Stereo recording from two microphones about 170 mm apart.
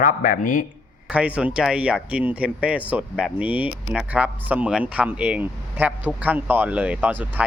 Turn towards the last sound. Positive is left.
turn(degrees=-10)  # may be behind; listen again after turning